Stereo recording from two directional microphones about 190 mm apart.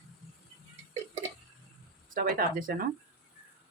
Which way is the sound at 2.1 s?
50° right (ahead or behind).